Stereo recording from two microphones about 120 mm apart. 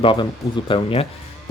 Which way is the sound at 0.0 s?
40° left (ahead or behind).